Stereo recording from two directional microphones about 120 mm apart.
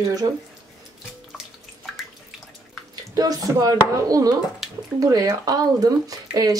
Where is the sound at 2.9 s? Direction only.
30° right (ahead or behind).